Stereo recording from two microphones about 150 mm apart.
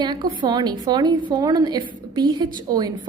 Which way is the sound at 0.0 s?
30° right (ahead or behind).